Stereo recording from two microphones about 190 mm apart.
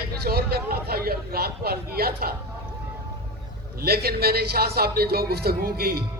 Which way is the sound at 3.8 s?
55° right (ahead or behind).